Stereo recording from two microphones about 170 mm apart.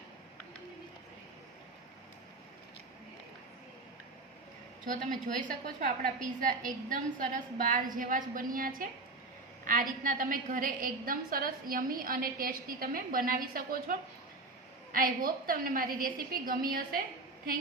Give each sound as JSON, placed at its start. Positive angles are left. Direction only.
{"t": 4.9, "sound": "a woman's voice", "side_deg": -50}
{"t": 14.9, "sound": "a woman's voice", "side_deg": -60}